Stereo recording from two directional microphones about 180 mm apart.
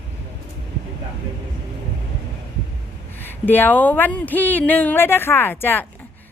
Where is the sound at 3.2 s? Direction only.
10° left (ahead or behind).